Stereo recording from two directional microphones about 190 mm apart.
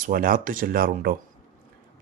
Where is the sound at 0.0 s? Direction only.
50° right (ahead or behind).